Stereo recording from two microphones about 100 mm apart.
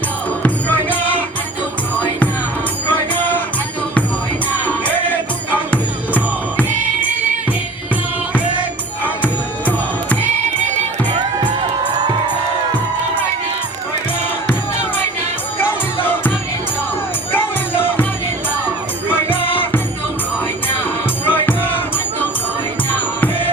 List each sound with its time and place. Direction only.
0.4 s music: 15° left (ahead or behind)
2.9 s music: 15° left (ahead or behind)
4.6 s music: 15° left (ahead or behind)
9.2 s music: 15° left (ahead or behind)
11.1 s music: 45° right (ahead or behind)
19.0 s music: 20° left (ahead or behind)
21.2 s music: 20° left (ahead or behind)